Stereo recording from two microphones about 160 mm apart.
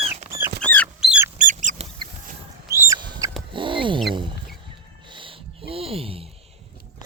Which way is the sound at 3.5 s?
30° right (ahead or behind).